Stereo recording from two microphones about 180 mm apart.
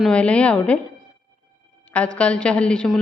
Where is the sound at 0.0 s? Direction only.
5° left (ahead or behind).